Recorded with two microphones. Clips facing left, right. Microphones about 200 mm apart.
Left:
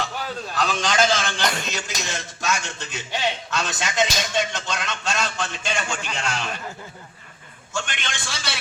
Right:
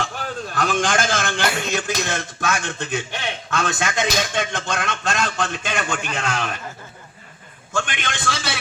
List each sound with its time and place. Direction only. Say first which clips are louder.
0.5 s a man's voice: right 2 dB; 50° right (ahead or behind)
7.7 s a man's voice: right 4 dB; 55° right (ahead or behind)